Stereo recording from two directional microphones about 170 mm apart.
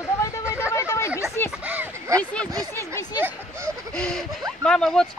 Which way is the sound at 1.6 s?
10° right (ahead or behind).